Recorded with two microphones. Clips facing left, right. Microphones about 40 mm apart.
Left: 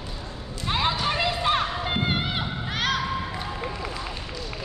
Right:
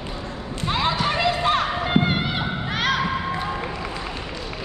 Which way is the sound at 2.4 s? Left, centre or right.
Right.